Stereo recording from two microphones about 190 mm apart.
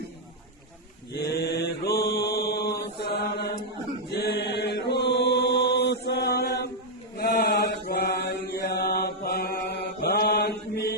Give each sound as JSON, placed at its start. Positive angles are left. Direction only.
{"t": 1.1, "sound": "mantra", "side_deg": 60}
{"t": 4.1, "sound": "chant", "side_deg": 60}
{"t": 7.2, "sound": "mantra", "side_deg": 55}